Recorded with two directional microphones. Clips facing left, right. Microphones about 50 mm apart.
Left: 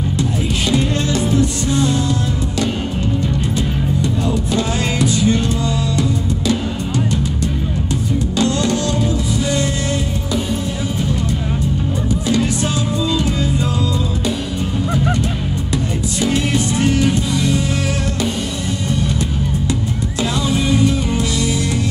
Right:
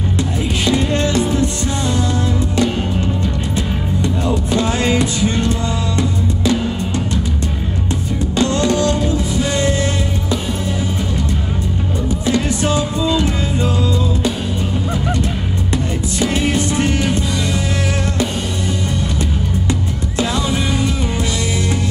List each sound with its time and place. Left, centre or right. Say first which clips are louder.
0.7 s music: right 2 dB; right
4.5 s music: right 3 dB; right
8.4 s music: right 3 dB; right
12.3 s music: right 2 dB; right
16.2 s music: right 1 dB; right